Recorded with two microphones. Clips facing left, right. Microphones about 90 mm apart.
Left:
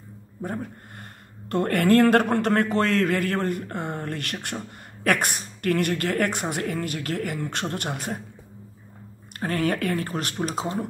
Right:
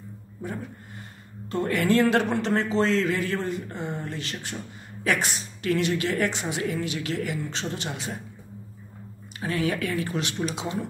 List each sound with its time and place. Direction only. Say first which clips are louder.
0.4 s a sound: left 3 dB; 50° left (ahead or behind)
1.5 s a man's voice: left 3 dB; 55° left (ahead or behind)
9.4 s a woman's voice: left 2 dB; 45° left (ahead or behind)